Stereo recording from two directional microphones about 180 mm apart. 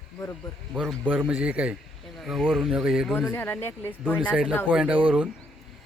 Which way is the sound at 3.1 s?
15° left (ahead or behind).